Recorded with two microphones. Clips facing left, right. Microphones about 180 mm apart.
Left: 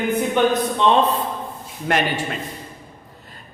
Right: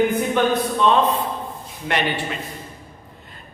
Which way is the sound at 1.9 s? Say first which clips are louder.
Left 2 dB; 45° left (ahead or behind).